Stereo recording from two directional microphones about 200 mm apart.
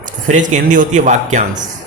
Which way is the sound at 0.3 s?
40° right (ahead or behind).